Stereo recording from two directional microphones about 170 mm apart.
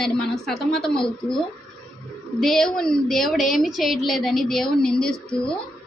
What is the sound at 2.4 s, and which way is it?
A woman's voice, centre (ahead or behind).